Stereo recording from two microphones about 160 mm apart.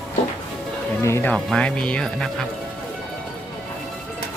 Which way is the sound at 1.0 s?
15° left (ahead or behind).